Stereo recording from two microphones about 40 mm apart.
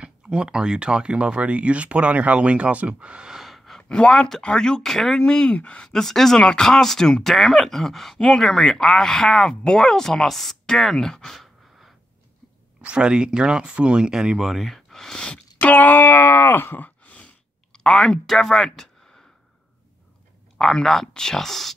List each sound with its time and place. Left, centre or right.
0.0 s speech: right
3.4 s a sound: centre
3.9 s speech: left; by 5.2 s centre
5.2 s speech: left
5.9 s speech: centre
12.8 s speech: right
14.5 s gasp: centre
15.6 s a sound: left
16.0 s wail: left
17.7 s speech: centre
20.5 s speech: centre